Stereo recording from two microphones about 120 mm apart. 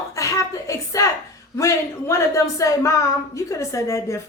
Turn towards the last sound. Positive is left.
turn(degrees=25)  # may be behind; listen again after turning